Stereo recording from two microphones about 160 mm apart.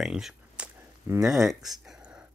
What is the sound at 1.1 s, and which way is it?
Speech, 20° right (ahead or behind).